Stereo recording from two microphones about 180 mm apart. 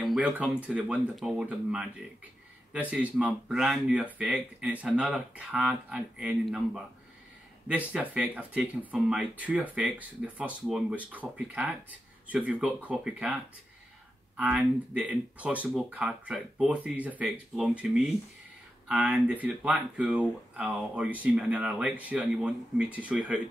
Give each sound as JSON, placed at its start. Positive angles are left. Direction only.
{"t": 0.0, "sound": "speech", "side_deg": 0}